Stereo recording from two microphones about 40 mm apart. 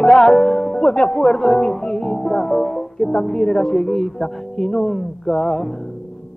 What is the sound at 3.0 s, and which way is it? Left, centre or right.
Speech, left.